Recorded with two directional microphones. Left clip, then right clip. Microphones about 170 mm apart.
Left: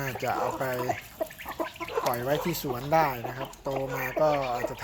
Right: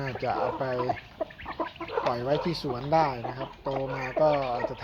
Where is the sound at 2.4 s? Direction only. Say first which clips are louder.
Even; 35° left (ahead or behind).